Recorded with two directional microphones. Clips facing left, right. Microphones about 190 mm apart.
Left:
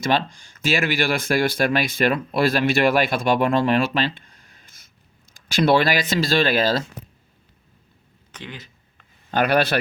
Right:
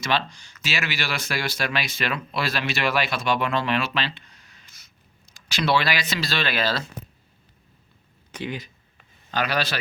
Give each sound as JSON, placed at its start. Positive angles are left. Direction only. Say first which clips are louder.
{"t": 0.0, "sound": "speech", "louder": "left 4 dB", "side_deg": 50}
{"t": 8.3, "sound": "speech", "louder": "right 6 dB", "side_deg": -10}
{"t": 9.3, "sound": "speech", "louder": "left 7 dB", "side_deg": 55}